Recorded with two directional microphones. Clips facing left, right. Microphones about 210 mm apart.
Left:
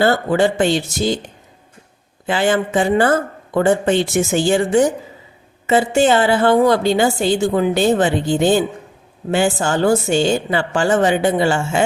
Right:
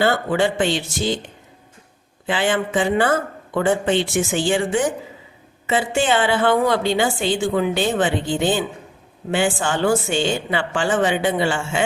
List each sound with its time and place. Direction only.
0.0 s a woman's voice: 40° left (ahead or behind)